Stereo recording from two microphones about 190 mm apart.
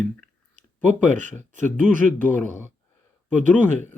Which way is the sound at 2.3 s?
10° left (ahead or behind).